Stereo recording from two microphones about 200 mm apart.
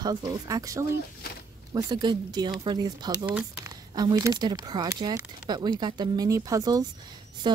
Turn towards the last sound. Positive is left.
turn(degrees=-20)  # may be behind; listen again after turning